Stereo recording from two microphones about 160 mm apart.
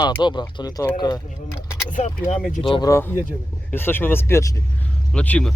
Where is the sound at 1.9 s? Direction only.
50° left (ahead or behind).